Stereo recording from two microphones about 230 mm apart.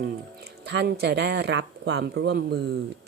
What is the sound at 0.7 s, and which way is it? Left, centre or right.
Speech, right.